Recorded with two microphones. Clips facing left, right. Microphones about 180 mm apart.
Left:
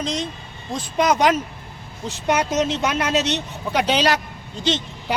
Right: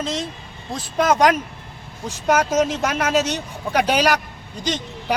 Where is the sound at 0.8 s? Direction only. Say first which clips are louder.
Right 1 dB; 45° right (ahead or behind).